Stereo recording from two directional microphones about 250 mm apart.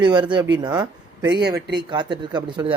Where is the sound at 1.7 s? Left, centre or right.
Centre.